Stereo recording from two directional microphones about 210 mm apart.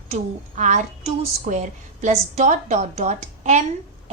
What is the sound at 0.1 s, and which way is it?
A woman's voice, 35° right (ahead or behind).